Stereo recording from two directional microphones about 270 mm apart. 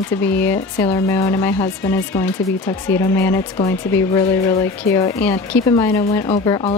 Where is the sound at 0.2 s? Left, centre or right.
Centre.